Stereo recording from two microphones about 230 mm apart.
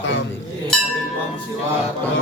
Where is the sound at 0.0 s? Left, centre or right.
Left.